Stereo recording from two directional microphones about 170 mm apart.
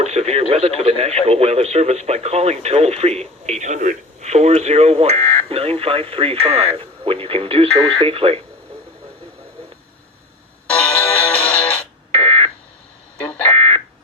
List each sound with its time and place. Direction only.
0.0 s speech: 40° right (ahead or behind)
5.1 s a sound: 15° left (ahead or behind)
5.5 s speech: 35° right (ahead or behind)
10.7 s music: 10° left (ahead or behind)
12.1 s smoke detector: 35° right (ahead or behind)
13.6 s a sound: 35° right (ahead or behind)